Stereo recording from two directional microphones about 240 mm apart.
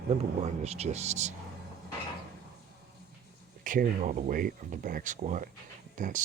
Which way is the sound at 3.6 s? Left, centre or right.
Right.